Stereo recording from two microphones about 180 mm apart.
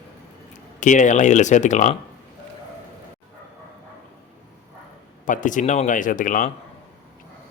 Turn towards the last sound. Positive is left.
turn(degrees=45)  # may be behind; listen again after turning